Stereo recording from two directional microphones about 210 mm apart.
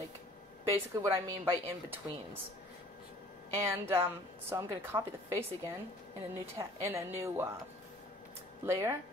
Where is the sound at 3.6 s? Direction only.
10° right (ahead or behind).